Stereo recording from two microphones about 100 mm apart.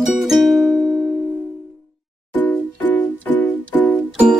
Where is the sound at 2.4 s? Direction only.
15° left (ahead or behind).